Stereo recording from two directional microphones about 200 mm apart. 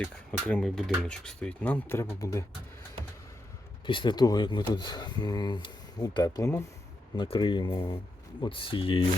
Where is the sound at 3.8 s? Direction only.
25° left (ahead or behind).